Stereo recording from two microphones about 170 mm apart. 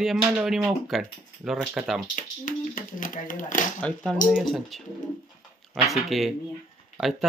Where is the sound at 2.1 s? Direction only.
50° left (ahead or behind).